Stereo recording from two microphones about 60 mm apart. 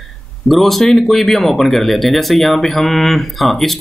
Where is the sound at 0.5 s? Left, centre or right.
Centre.